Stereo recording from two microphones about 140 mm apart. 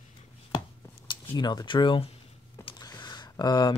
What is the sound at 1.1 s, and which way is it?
Speech, 30° left (ahead or behind).